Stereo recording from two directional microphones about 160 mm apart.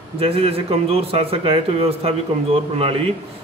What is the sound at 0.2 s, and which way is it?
A man's voice, 35° right (ahead or behind).